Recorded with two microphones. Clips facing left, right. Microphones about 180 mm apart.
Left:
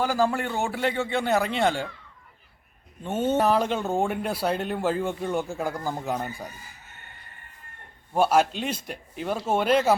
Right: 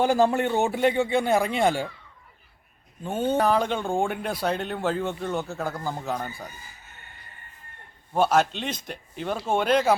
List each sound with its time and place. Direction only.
0.0 s a man's voice: 25° right (ahead or behind)
3.0 s speech: centre (ahead or behind)
8.1 s speech: 10° left (ahead or behind)